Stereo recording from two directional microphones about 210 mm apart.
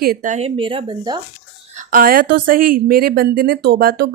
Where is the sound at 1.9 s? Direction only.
40° right (ahead or behind).